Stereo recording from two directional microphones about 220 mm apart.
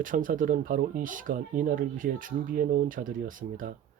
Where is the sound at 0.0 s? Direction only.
35° right (ahead or behind).